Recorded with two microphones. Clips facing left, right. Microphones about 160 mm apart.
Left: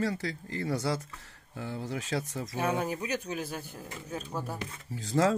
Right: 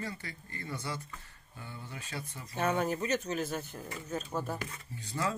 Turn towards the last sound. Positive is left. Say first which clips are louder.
# left 9 dB
turn(degrees=90)